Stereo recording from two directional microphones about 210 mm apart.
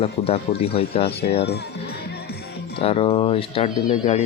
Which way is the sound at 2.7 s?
25° left (ahead or behind).